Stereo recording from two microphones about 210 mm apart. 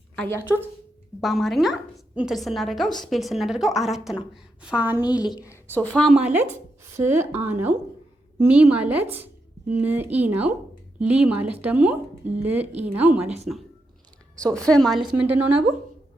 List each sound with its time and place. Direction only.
1.2 s a woman's voice: centre (ahead or behind)
5.2 s a woman's voice: 15° left (ahead or behind)
5.7 s a woman's voice: 5° left (ahead or behind)
14.3 s a woman's voice: 5° left (ahead or behind)